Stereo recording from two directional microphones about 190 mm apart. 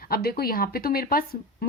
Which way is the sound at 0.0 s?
55° left (ahead or behind).